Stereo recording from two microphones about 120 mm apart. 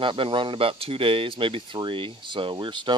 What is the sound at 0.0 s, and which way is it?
Speech, 45° right (ahead or behind).